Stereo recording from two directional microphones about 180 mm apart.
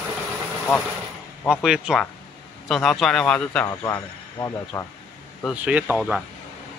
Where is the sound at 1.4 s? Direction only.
5° right (ahead or behind).